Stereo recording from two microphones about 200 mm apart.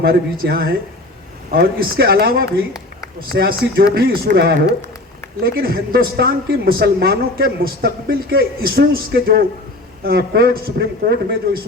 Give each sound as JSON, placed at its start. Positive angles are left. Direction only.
{"t": 0.0, "sound": "speech", "side_deg": -50}